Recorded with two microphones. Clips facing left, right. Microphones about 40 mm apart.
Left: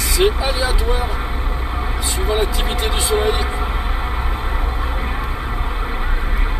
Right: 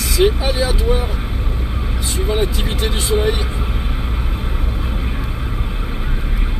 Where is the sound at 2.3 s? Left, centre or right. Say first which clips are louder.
Even; centre.